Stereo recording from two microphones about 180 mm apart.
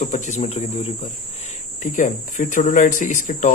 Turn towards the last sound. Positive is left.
turn(degrees=45)  # may be behind; listen again after turning